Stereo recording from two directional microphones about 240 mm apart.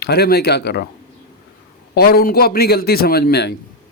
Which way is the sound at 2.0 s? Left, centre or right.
Left.